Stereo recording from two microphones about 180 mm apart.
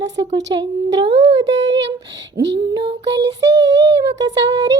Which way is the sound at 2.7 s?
30° right (ahead or behind).